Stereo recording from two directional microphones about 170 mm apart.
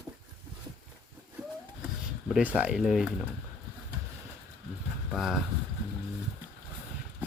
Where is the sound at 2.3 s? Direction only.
5° right (ahead or behind).